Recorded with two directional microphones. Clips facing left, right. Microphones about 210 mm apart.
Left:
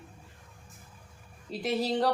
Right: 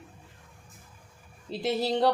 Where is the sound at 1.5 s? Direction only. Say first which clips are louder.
Right 2 dB; 30° right (ahead or behind).